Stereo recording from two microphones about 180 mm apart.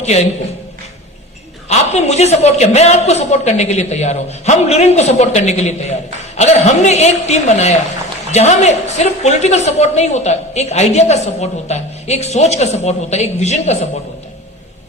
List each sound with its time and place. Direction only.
0.0 s a woman's voice: 40° left (ahead or behind)
1.7 s a woman's voice: 40° left (ahead or behind)